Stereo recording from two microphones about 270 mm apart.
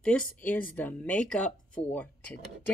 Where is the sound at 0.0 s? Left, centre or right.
Centre.